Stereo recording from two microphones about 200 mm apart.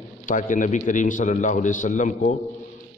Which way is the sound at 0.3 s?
40° left (ahead or behind).